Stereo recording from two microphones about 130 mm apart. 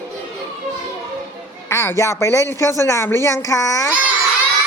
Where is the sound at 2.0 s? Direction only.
20° left (ahead or behind).